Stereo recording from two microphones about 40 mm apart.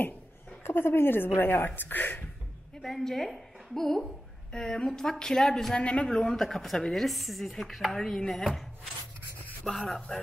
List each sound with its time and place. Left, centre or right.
0.7 s a woman's voice: left
2.8 s a woman's voice: centre
5.8 s a man's voice: left
6.0 s a woman's voice: centre
6.4 s speech: centre
9.7 s a woman's voice: centre